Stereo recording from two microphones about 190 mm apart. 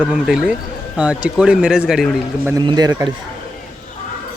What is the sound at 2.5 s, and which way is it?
Speech, 20° right (ahead or behind).